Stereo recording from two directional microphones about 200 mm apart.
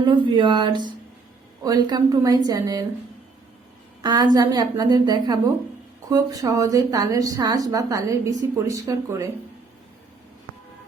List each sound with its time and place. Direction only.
0.0 s a woman's voice: 25° right (ahead or behind)
4.0 s a woman's voice: 20° right (ahead or behind)